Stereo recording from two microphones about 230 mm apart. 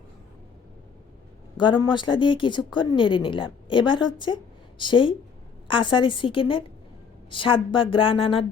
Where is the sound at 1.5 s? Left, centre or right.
Centre.